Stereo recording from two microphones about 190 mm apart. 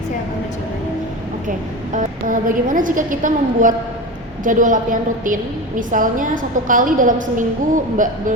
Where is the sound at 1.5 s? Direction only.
45° right (ahead or behind).